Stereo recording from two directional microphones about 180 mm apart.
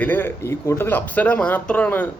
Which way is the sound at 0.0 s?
10° left (ahead or behind).